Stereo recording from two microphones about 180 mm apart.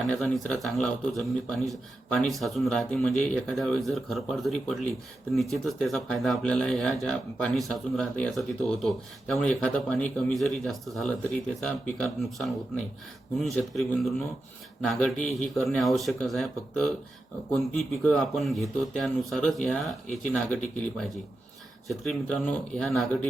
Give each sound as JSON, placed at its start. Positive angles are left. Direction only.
{"t": 0.1, "sound": "speech", "side_deg": 5}
{"t": 21.8, "sound": "speech", "side_deg": 0}